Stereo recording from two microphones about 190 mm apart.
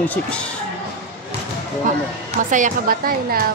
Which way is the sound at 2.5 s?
45° right (ahead or behind).